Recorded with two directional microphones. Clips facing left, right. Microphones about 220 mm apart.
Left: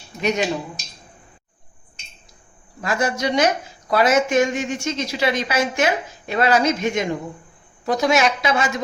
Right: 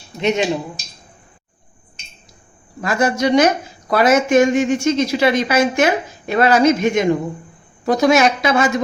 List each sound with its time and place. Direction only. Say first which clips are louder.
0.2 s speech: right 4 dB; 25° right (ahead or behind)
2.8 s speech: right 5 dB; 50° right (ahead or behind)